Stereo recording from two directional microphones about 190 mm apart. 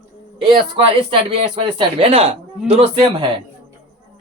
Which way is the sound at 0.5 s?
25° right (ahead or behind).